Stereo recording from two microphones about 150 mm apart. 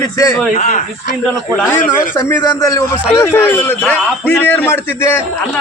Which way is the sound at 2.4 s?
20° left (ahead or behind).